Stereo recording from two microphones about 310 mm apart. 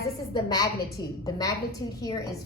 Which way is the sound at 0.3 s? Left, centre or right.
Centre.